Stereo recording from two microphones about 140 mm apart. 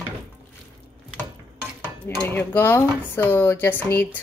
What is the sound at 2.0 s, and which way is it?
Speech, 15° left (ahead or behind).